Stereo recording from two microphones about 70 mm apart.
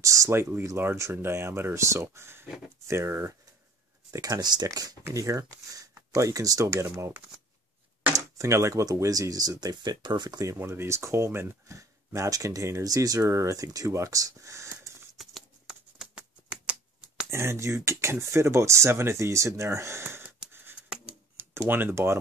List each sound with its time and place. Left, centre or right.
0.0 s speech: right
0.4 s speech: right
4.2 s speech: right
10.4 s speech: right
12.8 s speech: right
15.2 s a sound: centre
16.0 s a sound: centre
17.3 s speech: right
21.4 s speech: right